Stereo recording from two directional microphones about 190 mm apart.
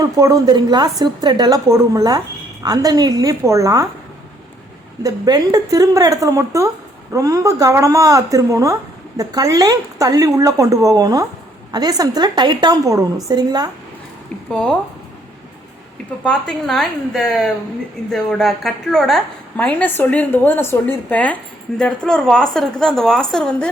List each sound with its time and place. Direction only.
0.0 s a woman's voice: 20° right (ahead or behind)
5.0 s a woman's voice: 20° right (ahead or behind)
14.5 s a woman's voice: 5° left (ahead or behind)
16.2 s a woman's voice: 5° left (ahead or behind)